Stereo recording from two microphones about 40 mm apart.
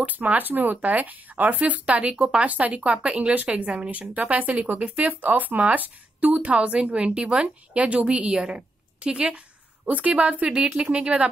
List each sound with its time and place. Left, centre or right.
0.0 s speech: right
2.0 s speech: right
9.8 s speech: right